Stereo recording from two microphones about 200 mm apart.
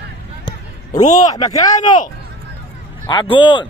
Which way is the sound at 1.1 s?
20° left (ahead or behind).